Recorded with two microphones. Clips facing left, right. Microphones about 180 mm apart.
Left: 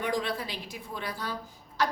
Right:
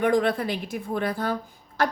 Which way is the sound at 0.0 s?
55° right (ahead or behind).